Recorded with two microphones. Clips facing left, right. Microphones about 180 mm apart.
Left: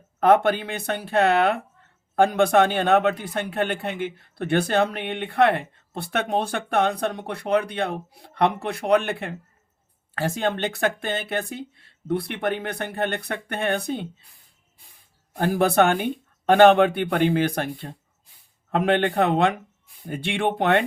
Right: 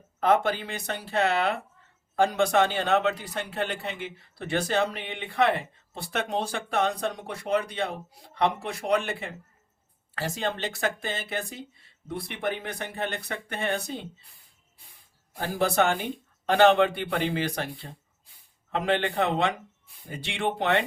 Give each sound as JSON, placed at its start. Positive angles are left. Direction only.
{"t": 0.2, "sound": "a man's voice", "side_deg": 55}
{"t": 15.4, "sound": "a man's voice", "side_deg": 55}